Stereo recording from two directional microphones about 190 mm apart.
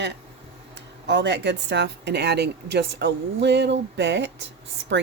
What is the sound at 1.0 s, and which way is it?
A woman's voice, 65° right (ahead or behind).